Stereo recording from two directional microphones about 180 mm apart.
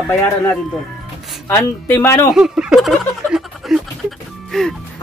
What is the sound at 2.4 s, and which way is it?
Fowl, 5° right (ahead or behind).